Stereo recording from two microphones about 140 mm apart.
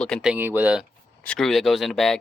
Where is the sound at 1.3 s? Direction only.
Centre (ahead or behind).